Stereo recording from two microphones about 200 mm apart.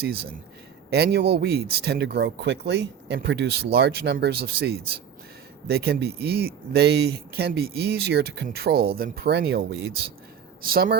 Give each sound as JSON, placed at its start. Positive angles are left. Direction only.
{"t": 0.0, "sound": "speech", "side_deg": -50}
{"t": 10.6, "sound": "speech", "side_deg": -45}